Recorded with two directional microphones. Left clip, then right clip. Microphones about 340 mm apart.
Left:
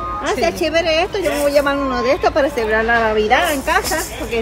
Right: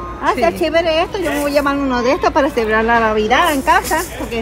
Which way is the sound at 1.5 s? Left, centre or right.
Centre.